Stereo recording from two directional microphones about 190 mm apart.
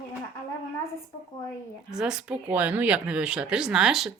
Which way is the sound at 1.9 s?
5° right (ahead or behind).